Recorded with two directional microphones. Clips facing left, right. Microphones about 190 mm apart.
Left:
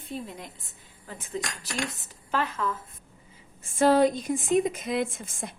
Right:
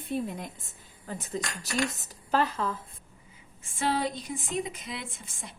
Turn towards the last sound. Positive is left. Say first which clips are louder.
# left 12 dB
turn(degrees=45)  # may be behind; listen again after turning